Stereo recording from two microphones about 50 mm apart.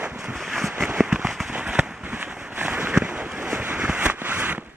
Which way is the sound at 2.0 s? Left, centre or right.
Right.